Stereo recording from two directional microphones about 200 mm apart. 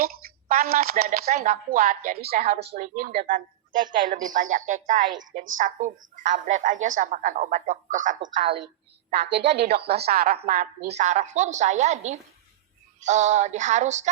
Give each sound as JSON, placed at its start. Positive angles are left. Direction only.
{"t": 0.0, "sound": "a woman's voice", "side_deg": -45}
{"t": 9.0, "sound": "speech", "side_deg": -55}
{"t": 10.9, "sound": "a woman's voice", "side_deg": -35}